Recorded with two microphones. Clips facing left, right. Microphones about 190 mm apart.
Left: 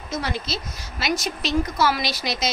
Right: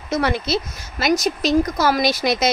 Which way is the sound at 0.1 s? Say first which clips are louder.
Right 8 dB; 60° right (ahead or behind).